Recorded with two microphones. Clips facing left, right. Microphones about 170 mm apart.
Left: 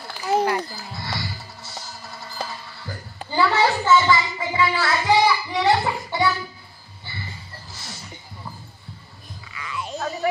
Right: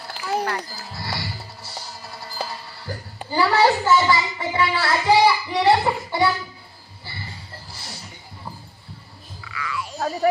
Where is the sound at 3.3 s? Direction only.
35° right (ahead or behind).